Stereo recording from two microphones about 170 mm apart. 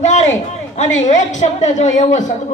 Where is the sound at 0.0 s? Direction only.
45° left (ahead or behind).